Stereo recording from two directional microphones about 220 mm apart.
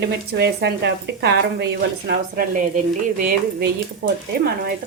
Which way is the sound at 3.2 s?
40° right (ahead or behind).